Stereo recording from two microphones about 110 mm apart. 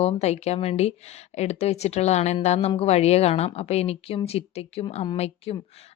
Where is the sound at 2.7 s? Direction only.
65° left (ahead or behind).